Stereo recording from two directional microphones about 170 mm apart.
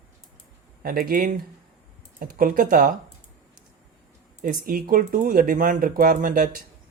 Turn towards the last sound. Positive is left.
turn(degrees=-55)  # may be behind; listen again after turning